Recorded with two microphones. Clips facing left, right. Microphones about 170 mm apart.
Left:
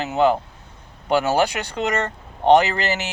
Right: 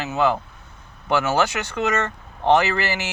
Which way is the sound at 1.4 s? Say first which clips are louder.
Left 1 dB; 35° left (ahead or behind).